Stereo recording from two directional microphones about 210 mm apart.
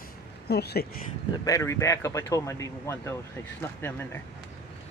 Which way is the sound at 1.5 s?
15° left (ahead or behind).